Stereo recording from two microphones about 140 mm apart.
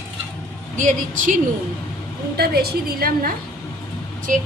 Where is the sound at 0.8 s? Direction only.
70° right (ahead or behind).